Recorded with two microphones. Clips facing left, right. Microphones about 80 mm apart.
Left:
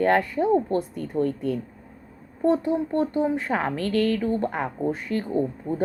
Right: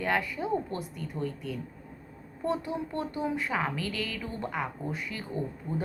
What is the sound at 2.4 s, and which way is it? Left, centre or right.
A woman's voice, left.